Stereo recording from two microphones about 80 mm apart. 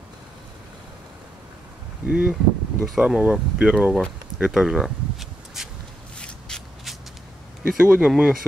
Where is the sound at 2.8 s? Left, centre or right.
Centre.